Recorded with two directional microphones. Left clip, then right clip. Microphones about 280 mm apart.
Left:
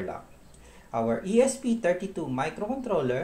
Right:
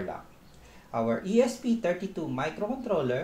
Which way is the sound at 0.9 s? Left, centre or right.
Centre.